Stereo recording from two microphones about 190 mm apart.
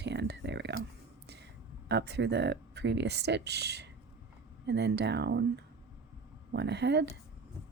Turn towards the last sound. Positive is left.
turn(degrees=-65)  # may be behind; listen again after turning